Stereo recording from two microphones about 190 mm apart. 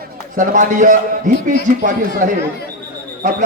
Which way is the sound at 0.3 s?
45° right (ahead or behind).